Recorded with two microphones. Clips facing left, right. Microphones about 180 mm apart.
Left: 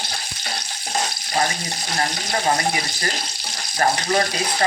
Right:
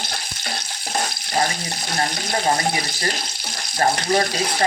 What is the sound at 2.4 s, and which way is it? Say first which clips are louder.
Speech: even; 30° right (ahead or behind).